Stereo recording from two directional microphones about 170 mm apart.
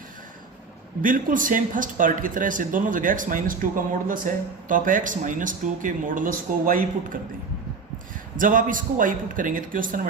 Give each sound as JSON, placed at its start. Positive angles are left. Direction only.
{"t": 1.0, "sound": "speech", "side_deg": -50}
{"t": 8.4, "sound": "speech", "side_deg": -50}